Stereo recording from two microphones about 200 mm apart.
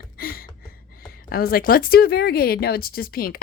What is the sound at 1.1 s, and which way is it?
A woman's voice, 45° left (ahead or behind).